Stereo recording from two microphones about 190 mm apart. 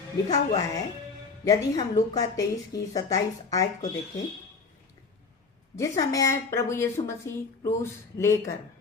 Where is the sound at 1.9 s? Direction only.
20° left (ahead or behind).